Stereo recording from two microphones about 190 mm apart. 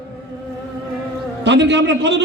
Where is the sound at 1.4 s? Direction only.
70° right (ahead or behind).